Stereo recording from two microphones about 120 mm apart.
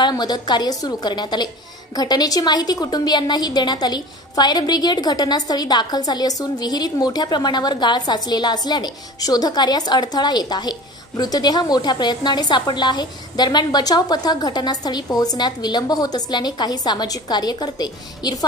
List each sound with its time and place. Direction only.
0.1 s a woman's voice: 35° left (ahead or behind)